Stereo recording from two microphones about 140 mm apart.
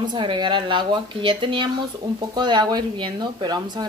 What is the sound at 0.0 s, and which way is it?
Speech, 35° right (ahead or behind).